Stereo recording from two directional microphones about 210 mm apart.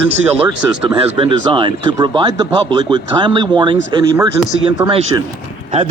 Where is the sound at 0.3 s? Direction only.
20° right (ahead or behind).